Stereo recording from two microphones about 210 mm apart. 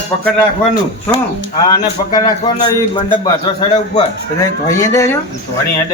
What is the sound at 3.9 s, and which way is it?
Speech, 15° left (ahead or behind).